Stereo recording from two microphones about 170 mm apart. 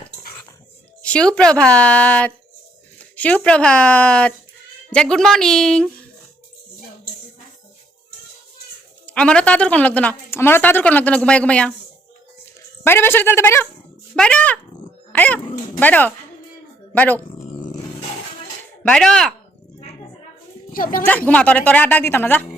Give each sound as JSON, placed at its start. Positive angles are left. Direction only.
{"t": 1.0, "sound": "a woman's voice", "side_deg": 5}
{"t": 9.0, "sound": "a woman's voice", "side_deg": 5}
{"t": 12.8, "sound": "a woman's voice", "side_deg": 15}
{"t": 15.1, "sound": "dog", "side_deg": 10}
{"t": 15.8, "sound": "a woman's voice", "side_deg": 10}
{"t": 18.8, "sound": "a woman's voice", "side_deg": 5}
{"t": 20.7, "sound": "speech", "side_deg": 55}
{"t": 21.2, "sound": "a woman's voice", "side_deg": 10}